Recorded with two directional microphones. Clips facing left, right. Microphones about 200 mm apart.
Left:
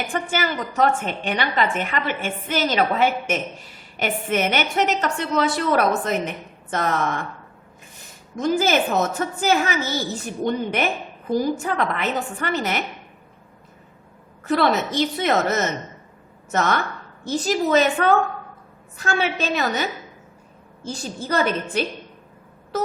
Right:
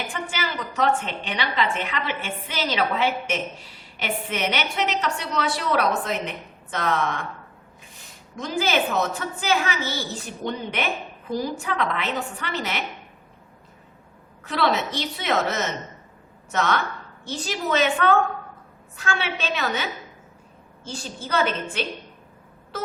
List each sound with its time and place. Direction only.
0.1 s a woman's voice: 50° left (ahead or behind)
8.4 s a woman's voice: 45° left (ahead or behind)
14.4 s a woman's voice: 50° left (ahead or behind)